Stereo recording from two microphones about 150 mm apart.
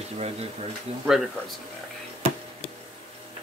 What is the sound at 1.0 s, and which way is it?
Speech, 5° right (ahead or behind).